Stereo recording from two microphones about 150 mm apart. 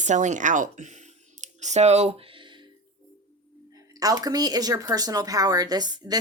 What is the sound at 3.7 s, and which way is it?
Speech, 25° right (ahead or behind).